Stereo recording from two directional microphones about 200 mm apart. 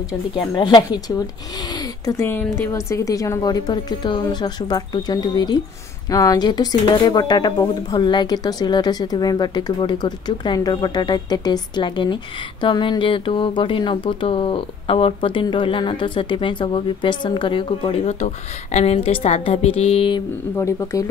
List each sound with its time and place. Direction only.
0.6 s speech: 20° left (ahead or behind)
20.5 s speech: 15° left (ahead or behind)